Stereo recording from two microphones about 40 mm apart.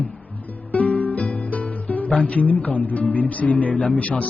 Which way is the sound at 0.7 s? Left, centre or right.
Left.